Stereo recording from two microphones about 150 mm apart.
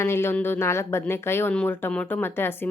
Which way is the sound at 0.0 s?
15° left (ahead or behind).